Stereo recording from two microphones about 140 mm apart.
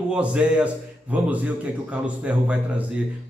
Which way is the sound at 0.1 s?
5° right (ahead or behind).